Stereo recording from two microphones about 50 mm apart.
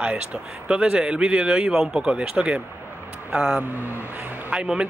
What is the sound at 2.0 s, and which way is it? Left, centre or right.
Speech, right.